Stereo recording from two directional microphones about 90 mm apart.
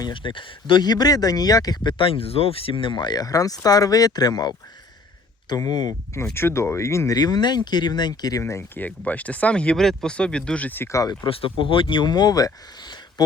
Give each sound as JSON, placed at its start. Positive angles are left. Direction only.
{"t": 0.1, "sound": "speech", "side_deg": 65}
{"t": 6.3, "sound": "speech", "side_deg": 30}
{"t": 7.2, "sound": "speech", "side_deg": 50}
{"t": 8.7, "sound": "speech", "side_deg": 20}
{"t": 10.9, "sound": "speech", "side_deg": 45}
{"t": 11.3, "sound": "speech", "side_deg": 90}